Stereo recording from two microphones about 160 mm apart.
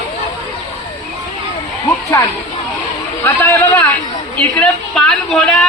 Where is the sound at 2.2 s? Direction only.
20° left (ahead or behind).